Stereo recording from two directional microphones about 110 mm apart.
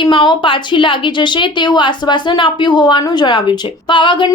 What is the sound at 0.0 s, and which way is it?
A woman's voice, 50° left (ahead or behind).